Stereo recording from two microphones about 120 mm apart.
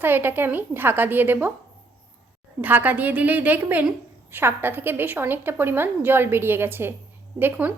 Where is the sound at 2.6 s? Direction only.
15° right (ahead or behind).